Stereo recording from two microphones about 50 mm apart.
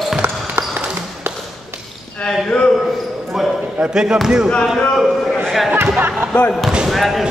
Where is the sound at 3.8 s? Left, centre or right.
Centre.